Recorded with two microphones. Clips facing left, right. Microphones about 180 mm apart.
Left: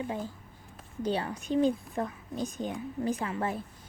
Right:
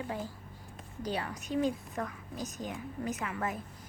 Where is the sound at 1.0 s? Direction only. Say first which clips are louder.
Left 5 dB; 30° left (ahead or behind).